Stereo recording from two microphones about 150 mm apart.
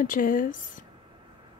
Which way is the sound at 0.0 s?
65° left (ahead or behind).